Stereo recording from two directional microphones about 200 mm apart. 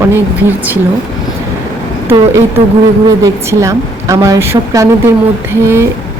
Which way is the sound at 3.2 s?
15° right (ahead or behind).